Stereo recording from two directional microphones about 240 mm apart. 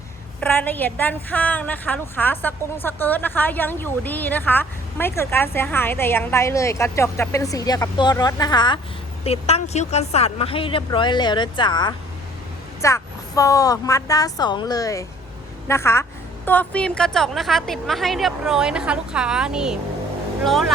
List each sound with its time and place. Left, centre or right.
0.3 s a woman's voice: centre